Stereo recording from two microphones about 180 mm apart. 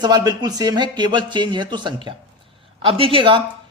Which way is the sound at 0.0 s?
20° right (ahead or behind).